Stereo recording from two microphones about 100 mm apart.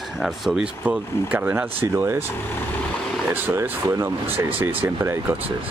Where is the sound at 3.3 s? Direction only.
20° right (ahead or behind).